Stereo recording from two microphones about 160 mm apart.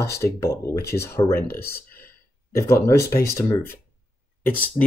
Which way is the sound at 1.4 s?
70° left (ahead or behind).